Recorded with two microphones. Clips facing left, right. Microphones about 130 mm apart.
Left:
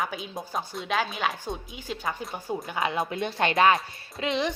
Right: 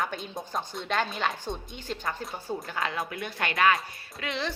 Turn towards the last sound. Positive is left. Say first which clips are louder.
# left 6 dB
turn(degrees=20)  # may be behind; listen again after turning